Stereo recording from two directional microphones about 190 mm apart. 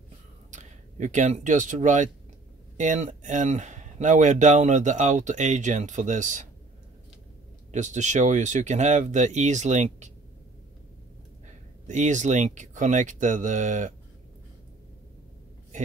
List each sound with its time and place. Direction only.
0.5 s speech: 40° right (ahead or behind)
7.7 s speech: 40° right (ahead or behind)
11.4 s speech: 40° right (ahead or behind)